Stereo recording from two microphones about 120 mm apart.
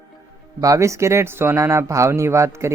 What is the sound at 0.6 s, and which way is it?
Speech, 25° right (ahead or behind).